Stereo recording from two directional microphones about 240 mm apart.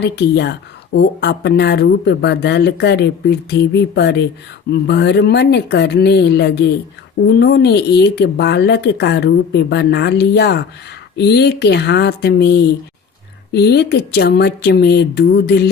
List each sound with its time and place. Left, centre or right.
0.0 s speech: left